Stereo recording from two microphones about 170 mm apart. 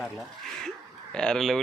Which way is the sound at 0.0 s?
Centre (ahead or behind).